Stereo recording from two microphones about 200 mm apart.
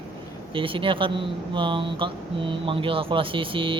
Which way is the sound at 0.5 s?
25° right (ahead or behind).